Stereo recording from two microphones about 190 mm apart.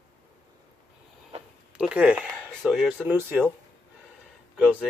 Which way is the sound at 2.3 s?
Centre (ahead or behind).